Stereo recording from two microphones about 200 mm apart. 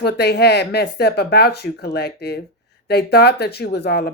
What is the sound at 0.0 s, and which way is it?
Speech, 55° left (ahead or behind).